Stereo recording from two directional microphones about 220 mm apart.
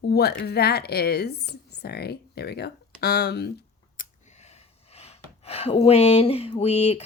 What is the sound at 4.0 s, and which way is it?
Speech, 30° left (ahead or behind).